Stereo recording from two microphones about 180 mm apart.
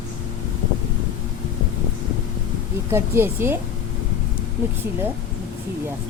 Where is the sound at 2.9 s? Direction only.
15° right (ahead or behind).